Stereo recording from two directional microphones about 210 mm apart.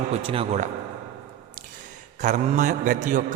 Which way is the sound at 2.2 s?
35° right (ahead or behind).